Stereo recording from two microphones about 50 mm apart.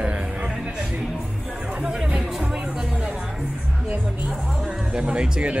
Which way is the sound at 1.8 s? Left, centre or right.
Centre.